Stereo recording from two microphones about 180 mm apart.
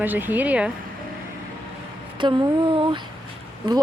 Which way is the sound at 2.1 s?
25° right (ahead or behind).